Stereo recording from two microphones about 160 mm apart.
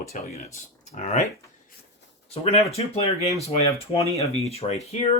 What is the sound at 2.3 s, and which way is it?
Speech, 40° left (ahead or behind).